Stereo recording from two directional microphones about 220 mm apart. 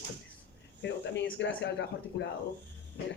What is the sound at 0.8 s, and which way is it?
Speech, 55° left (ahead or behind).